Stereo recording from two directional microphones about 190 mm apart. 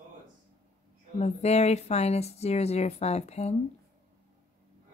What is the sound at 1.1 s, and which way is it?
A woman's voice, 35° left (ahead or behind).